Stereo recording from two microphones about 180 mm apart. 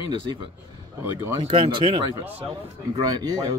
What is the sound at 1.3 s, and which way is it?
A man's voice, 30° right (ahead or behind).